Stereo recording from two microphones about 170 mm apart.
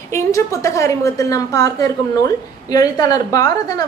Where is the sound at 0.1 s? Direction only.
20° left (ahead or behind).